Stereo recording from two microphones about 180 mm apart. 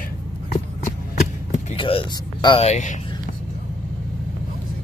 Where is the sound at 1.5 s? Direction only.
35° left (ahead or behind).